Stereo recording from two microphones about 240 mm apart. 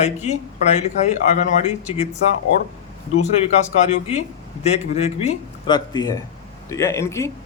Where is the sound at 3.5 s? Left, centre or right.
Left.